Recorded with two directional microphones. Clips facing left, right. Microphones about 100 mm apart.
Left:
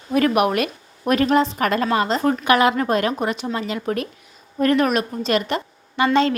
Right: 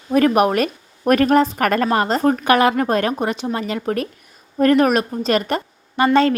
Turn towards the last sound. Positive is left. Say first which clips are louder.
# right 2 dB
turn(degrees=-45)  # may be behind; listen again after turning